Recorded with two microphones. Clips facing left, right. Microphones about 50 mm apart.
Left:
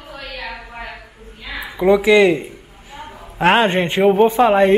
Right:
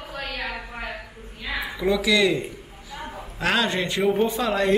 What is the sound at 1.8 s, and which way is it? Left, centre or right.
A man's voice, left.